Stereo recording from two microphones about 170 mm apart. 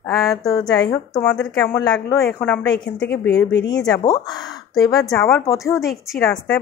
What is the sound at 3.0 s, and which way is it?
Speech, 75° left (ahead or behind).